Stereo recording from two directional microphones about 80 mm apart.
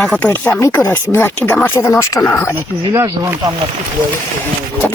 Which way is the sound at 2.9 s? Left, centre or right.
Right.